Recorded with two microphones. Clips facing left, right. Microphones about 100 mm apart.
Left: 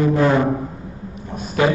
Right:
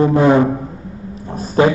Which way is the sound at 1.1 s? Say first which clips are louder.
Right 5 dB; 30° right (ahead or behind).